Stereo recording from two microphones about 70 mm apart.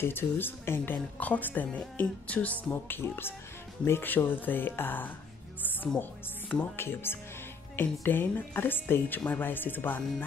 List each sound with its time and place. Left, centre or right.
0.0 s a woman's voice: left
6.5 s a woman's voice: left